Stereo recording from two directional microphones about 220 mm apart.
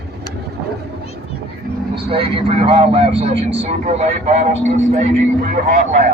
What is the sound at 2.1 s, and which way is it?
Speech, 25° right (ahead or behind).